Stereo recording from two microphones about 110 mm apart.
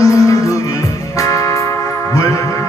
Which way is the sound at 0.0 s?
30° left (ahead or behind).